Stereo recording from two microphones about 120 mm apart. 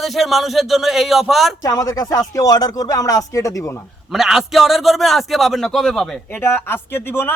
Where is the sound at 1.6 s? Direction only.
30° left (ahead or behind).